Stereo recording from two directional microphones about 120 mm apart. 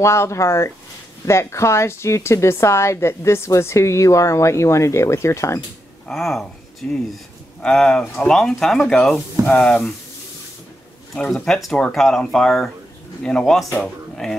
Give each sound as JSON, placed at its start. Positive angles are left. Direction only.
{"t": 0.0, "sound": "a woman's voice", "side_deg": 25}
{"t": 6.0, "sound": "speech", "side_deg": 0}
{"t": 11.1, "sound": "speech", "side_deg": 5}